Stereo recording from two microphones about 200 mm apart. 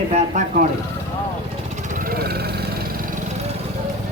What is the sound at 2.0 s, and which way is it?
Vehicle, 50° right (ahead or behind).